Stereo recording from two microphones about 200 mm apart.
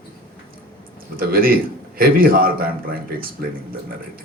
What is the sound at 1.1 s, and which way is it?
A man's voice, 45° right (ahead or behind).